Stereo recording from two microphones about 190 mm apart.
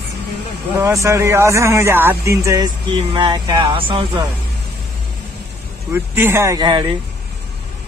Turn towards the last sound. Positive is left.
turn(degrees=-25)  # may be behind; listen again after turning